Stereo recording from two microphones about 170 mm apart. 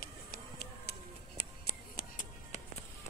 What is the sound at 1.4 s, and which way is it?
Music, 65° left (ahead or behind).